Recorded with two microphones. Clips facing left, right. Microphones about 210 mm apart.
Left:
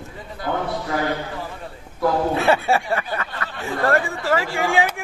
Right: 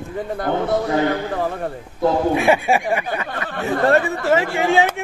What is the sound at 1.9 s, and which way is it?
A man's voice, 20° right (ahead or behind).